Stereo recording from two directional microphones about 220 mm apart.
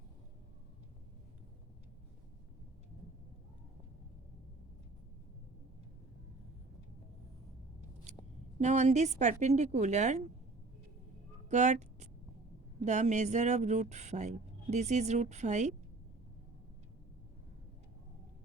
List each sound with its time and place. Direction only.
8.5 s speech: 30° right (ahead or behind)
11.4 s speech: 30° right (ahead or behind)